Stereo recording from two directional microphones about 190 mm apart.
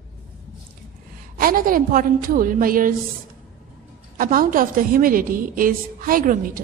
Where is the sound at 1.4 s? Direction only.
50° right (ahead or behind).